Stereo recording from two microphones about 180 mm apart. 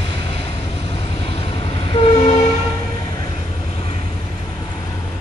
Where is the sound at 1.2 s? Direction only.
30° left (ahead or behind).